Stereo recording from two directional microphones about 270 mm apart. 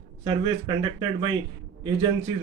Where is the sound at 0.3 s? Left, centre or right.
Centre.